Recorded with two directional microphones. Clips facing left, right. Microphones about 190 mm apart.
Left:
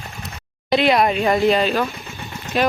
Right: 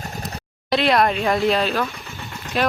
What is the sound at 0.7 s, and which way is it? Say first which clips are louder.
Speech: left 2 dB; centre (ahead or behind).